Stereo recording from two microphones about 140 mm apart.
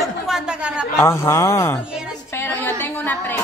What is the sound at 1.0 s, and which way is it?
A woman's voice, 20° left (ahead or behind).